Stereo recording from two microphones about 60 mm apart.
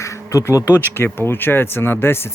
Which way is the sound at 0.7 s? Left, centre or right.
Left.